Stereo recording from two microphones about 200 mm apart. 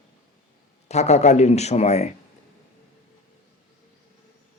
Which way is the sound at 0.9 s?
35° left (ahead or behind).